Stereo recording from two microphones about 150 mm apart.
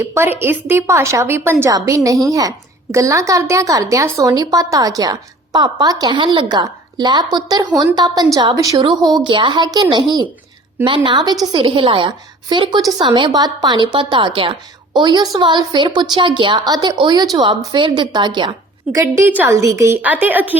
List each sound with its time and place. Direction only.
0.0 s a woman's voice: 15° right (ahead or behind)
18.9 s a woman's voice: 15° right (ahead or behind)